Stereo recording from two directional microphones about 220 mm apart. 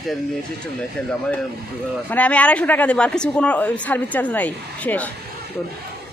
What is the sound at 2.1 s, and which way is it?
Speech, 5° left (ahead or behind).